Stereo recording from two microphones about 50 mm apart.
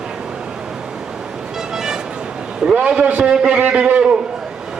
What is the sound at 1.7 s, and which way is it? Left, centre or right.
Music, centre.